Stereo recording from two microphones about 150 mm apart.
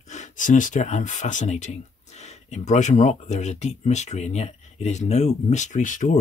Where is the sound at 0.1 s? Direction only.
55° left (ahead or behind).